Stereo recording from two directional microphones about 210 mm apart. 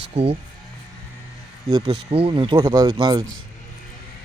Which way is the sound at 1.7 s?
25° right (ahead or behind).